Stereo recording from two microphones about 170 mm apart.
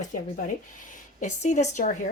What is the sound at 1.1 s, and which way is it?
Speech, 45° left (ahead or behind).